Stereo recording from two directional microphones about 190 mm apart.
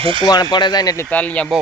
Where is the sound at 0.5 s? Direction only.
20° left (ahead or behind); by 1.5 s 5° left (ahead or behind).